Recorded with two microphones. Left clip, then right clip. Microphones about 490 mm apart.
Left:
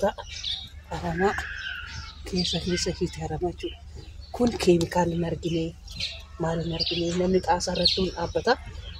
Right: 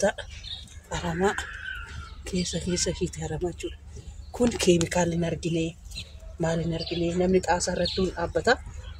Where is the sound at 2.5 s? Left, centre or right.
Left.